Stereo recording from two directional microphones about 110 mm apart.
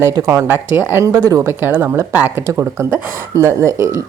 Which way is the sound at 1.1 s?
30° right (ahead or behind).